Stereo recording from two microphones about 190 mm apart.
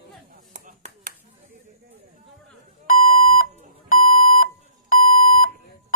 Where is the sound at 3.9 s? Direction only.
45° left (ahead or behind).